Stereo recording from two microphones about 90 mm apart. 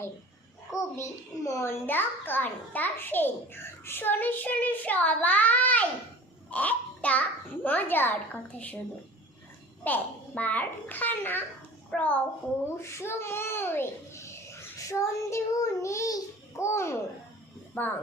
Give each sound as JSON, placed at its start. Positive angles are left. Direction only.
{"t": 0.7, "sound": "a child's voice", "side_deg": 35}
{"t": 9.8, "sound": "a child's voice", "side_deg": 20}
{"t": 12.8, "sound": "a child's voice", "side_deg": 30}